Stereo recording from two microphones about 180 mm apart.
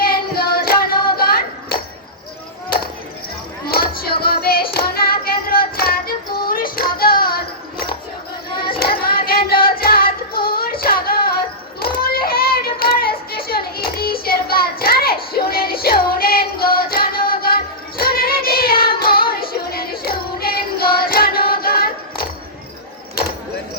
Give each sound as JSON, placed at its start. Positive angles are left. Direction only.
{"t": 0.0, "sound": "child singing", "side_deg": 55}
{"t": 1.1, "sound": "a sound", "side_deg": 55}
{"t": 3.7, "sound": "a sound", "side_deg": 55}
{"t": 4.2, "sound": "child singing", "side_deg": 55}
{"t": 8.8, "sound": "singing", "side_deg": 55}
{"t": 11.8, "sound": "child singing", "side_deg": 55}